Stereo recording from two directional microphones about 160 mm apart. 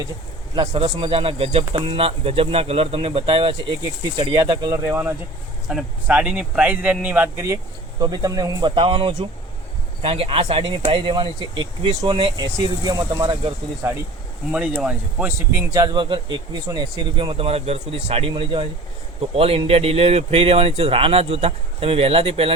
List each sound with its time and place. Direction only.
0.9 s a man's voice: 30° right (ahead or behind)
4.9 s a man's voice: 10° right (ahead or behind)
14.5 s a man's voice: 5° right (ahead or behind); by 22.5 s 35° right (ahead or behind)